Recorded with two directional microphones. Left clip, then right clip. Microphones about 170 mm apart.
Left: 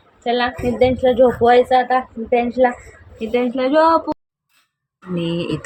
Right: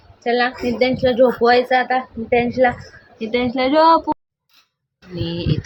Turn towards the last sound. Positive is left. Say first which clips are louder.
# left 3 dB
turn(degrees=50)  # may be behind; listen again after turning